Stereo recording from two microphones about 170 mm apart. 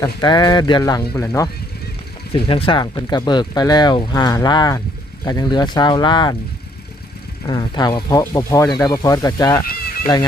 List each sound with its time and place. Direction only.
0.0 s speech: 25° left (ahead or behind)
2.3 s speech: 30° left (ahead or behind)
7.4 s speech: 25° left (ahead or behind)